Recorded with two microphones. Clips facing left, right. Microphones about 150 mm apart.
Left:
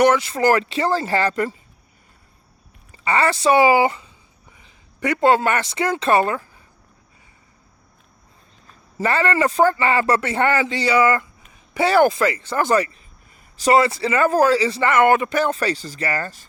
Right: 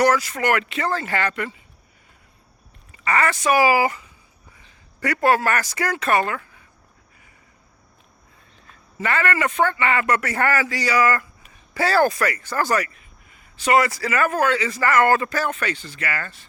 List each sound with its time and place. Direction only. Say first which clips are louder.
0.0 s speech: left 3 dB; 25° left (ahead or behind)
2.9 s speech: left 2 dB; 30° left (ahead or behind)
9.0 s a man's voice: left 4 dB; 35° left (ahead or behind)
13.7 s a man's voice: left 1 dB; 25° left (ahead or behind)
15.5 s speech: left 5 dB; 35° left (ahead or behind)